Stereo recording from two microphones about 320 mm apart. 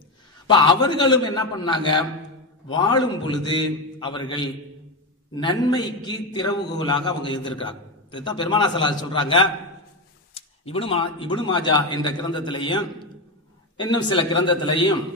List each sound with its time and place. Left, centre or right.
0.5 s a man's voice: centre
13.7 s a man's voice: centre